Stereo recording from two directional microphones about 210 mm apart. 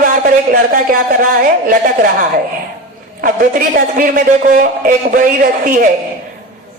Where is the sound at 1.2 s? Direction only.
40° right (ahead or behind).